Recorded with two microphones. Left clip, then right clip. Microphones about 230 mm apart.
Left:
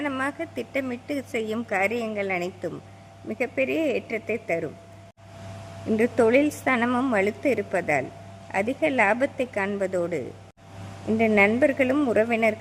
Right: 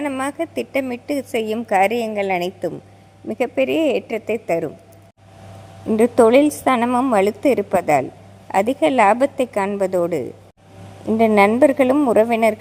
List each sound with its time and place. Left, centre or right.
0.0 s a woman's voice: centre
6.0 s a woman's voice: centre